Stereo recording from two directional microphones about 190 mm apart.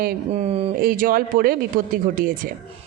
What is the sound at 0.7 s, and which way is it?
A woman's voice, 50° right (ahead or behind).